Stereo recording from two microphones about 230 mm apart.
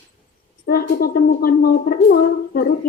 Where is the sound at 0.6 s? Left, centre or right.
Left.